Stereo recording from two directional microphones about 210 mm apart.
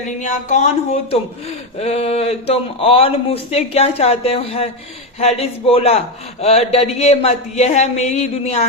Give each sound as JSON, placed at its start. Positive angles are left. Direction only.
{"t": 0.2, "sound": "speech", "side_deg": 35}
{"t": 1.8, "sound": "speech", "side_deg": 30}